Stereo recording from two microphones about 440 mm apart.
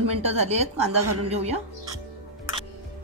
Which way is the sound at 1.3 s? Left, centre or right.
Centre.